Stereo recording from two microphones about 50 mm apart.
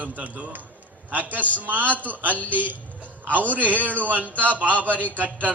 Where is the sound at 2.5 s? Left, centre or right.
Right.